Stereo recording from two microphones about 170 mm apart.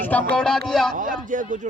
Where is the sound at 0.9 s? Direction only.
50° right (ahead or behind).